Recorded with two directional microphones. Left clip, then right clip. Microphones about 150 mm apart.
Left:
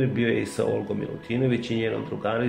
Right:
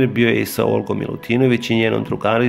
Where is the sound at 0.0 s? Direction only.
40° right (ahead or behind).